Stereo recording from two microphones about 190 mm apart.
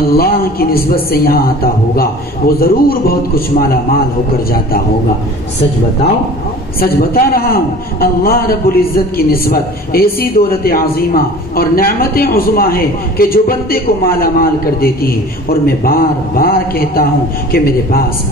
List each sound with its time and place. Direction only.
0.1 s a man's voice: 50° left (ahead or behind)
6.8 s a man's voice: 50° left (ahead or behind)